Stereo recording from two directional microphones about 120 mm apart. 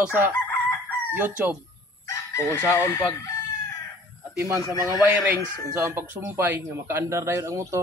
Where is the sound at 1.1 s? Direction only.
15° right (ahead or behind).